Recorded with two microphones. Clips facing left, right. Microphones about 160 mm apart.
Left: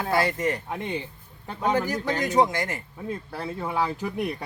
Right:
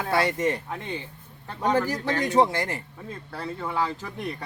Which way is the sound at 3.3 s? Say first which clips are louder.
Right 3 dB; 10° left (ahead or behind).